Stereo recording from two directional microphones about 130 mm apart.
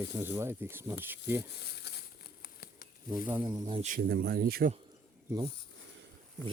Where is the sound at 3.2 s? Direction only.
15° right (ahead or behind).